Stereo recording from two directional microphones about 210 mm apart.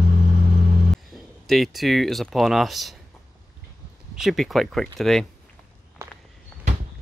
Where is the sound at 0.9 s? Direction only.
Centre (ahead or behind).